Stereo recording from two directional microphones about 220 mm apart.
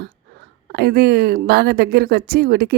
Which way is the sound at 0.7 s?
45° right (ahead or behind).